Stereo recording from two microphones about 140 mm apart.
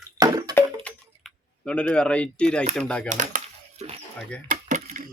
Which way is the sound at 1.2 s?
5° left (ahead or behind).